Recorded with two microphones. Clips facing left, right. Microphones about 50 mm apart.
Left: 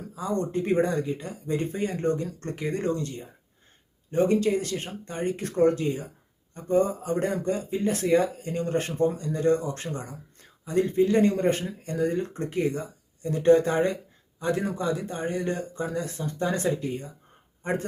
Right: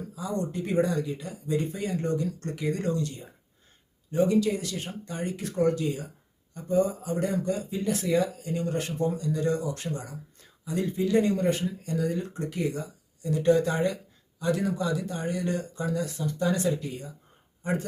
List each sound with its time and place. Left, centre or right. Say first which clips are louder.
0.2 s speech: left 4 dB; left